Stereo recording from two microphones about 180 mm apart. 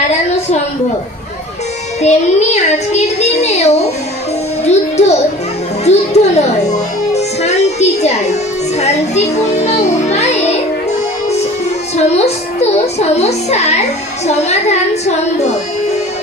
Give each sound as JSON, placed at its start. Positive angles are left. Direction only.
{"t": 2.0, "sound": "a child's voice", "side_deg": 40}
{"t": 11.9, "sound": "a child's voice", "side_deg": 35}